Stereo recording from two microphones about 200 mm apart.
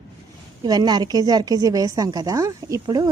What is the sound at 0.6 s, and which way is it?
A woman's voice, 20° right (ahead or behind).